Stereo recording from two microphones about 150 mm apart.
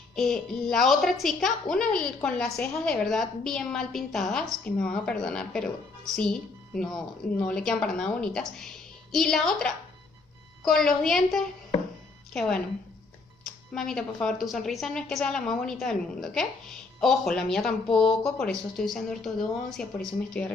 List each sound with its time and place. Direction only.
0.1 s a woman's voice: 5° left (ahead or behind)